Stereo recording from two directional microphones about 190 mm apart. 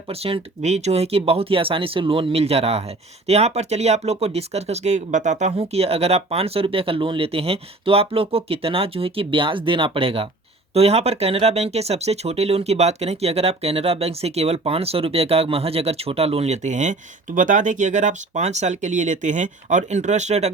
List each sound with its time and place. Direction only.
0.1 s speech: 30° right (ahead or behind)